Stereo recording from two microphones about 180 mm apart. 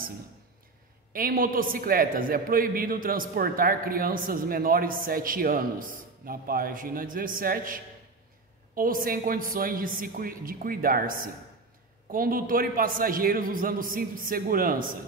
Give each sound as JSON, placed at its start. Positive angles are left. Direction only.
{"t": 1.1, "sound": "a man's voice", "side_deg": -55}